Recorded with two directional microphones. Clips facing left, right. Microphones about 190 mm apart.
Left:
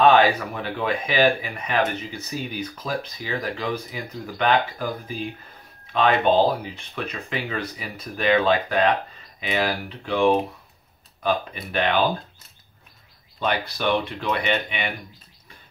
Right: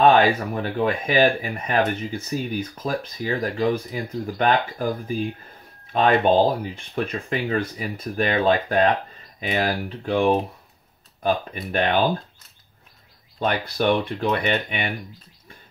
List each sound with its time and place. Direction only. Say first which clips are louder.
0.0 s speech: even; 45° right (ahead or behind)
13.4 s speech: right 2 dB; 45° right (ahead or behind)